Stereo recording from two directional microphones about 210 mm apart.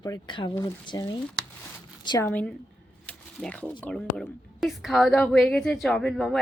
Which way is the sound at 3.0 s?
5° left (ahead or behind).